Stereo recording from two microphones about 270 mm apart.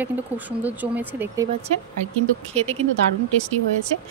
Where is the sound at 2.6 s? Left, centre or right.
Right.